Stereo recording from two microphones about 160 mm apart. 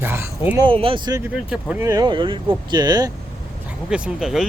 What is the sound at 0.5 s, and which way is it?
Speech, 35° right (ahead or behind).